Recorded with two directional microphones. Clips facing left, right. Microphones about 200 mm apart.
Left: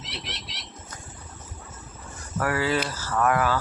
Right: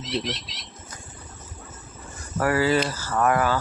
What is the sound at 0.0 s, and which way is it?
Speech, 65° left (ahead or behind).